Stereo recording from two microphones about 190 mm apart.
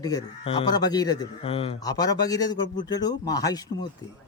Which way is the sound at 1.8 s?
20° left (ahead or behind).